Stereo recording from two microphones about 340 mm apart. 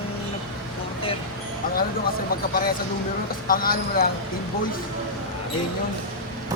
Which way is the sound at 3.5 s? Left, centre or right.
Left.